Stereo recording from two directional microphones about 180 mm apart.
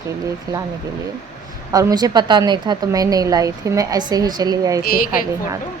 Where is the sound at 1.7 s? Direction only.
20° right (ahead or behind).